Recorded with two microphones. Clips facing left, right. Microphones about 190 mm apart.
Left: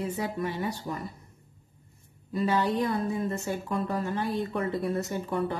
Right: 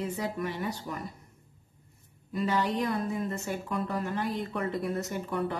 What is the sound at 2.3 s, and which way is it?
Speech, 30° left (ahead or behind).